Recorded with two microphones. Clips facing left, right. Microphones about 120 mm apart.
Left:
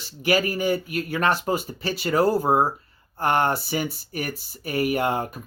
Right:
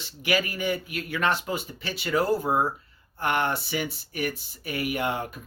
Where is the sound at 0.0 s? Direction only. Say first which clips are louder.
Left 4 dB; 40° left (ahead or behind).